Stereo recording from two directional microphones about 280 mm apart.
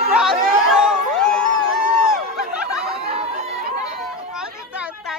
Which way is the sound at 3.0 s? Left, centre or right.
Right.